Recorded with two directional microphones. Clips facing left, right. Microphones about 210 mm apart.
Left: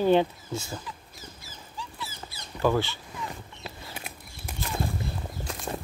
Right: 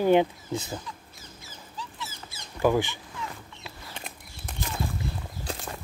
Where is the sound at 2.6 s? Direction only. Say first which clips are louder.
Right 1 dB; 15° right (ahead or behind).